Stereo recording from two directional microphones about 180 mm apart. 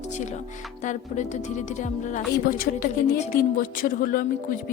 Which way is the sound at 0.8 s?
40° left (ahead or behind).